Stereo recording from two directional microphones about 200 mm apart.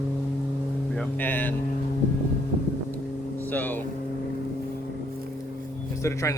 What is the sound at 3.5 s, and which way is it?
Speech, 10° left (ahead or behind).